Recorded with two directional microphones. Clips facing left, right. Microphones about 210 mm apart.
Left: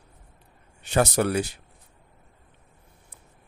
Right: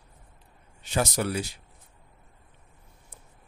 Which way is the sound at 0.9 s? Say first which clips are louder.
Left 5 dB; 65° left (ahead or behind).